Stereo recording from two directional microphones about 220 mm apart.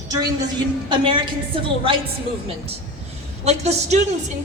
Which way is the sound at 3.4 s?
30° right (ahead or behind).